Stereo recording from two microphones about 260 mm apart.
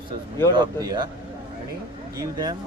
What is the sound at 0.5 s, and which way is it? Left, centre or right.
Speech, centre.